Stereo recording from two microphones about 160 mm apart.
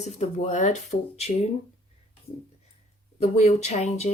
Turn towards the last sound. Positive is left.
turn(degrees=45)  # may be behind; listen again after turning